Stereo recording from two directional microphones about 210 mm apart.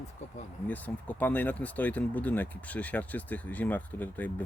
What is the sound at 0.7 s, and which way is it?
Speech, 10° left (ahead or behind).